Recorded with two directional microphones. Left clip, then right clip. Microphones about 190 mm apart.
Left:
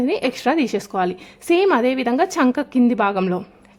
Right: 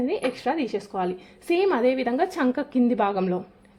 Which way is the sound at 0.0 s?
30° left (ahead or behind).